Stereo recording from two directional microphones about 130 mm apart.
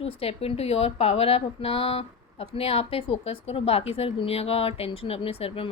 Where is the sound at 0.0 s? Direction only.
50° left (ahead or behind).